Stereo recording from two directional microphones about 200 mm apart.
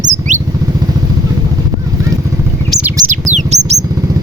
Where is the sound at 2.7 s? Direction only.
5° right (ahead or behind).